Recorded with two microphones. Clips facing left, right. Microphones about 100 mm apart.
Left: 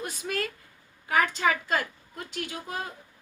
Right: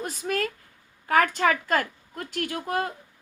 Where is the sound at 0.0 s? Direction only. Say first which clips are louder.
Right 4 dB; 45° right (ahead or behind).